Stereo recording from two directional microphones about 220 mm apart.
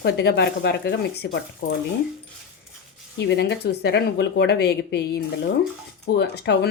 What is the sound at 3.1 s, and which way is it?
Speech, 55° left (ahead or behind).